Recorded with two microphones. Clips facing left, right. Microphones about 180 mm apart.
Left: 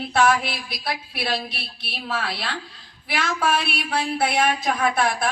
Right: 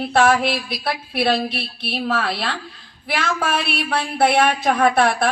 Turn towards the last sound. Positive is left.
turn(degrees=-60)  # may be behind; listen again after turning